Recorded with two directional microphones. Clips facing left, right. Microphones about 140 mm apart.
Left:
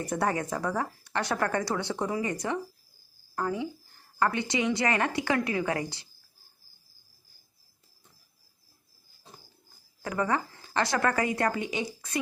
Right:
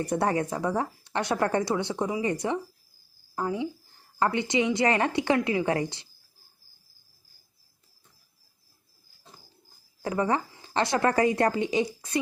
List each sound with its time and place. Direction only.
0.2 s a woman's voice: 25° right (ahead or behind)
10.0 s a woman's voice: 25° right (ahead or behind)